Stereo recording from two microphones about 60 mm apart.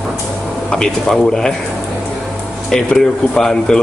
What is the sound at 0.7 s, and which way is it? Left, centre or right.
Speech, centre.